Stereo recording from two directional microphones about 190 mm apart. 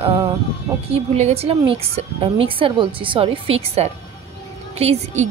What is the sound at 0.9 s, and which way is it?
A woman's voice, 35° right (ahead or behind).